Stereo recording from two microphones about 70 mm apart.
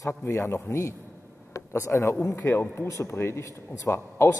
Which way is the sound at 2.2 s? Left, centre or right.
Left.